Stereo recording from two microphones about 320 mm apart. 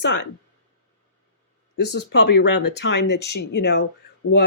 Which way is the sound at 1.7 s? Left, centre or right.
Left.